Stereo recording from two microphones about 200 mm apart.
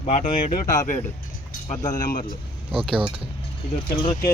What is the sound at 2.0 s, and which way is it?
Speech, 45° left (ahead or behind).